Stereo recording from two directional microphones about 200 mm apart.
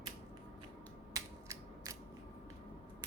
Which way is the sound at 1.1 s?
15° right (ahead or behind).